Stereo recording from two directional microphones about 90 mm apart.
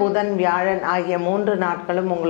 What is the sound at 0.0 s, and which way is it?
A woman's voice, 15° left (ahead or behind).